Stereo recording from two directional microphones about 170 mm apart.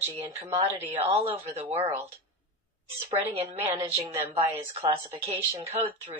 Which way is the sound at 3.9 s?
35° right (ahead or behind).